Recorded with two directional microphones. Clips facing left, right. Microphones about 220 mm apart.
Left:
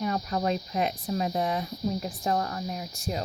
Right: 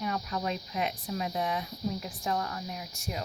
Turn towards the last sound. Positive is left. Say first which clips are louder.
# left 5 dB
turn(degrees=35)  # may be behind; listen again after turning